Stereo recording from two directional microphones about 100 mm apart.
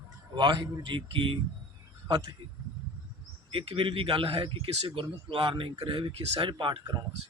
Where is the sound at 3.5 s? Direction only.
60° right (ahead or behind).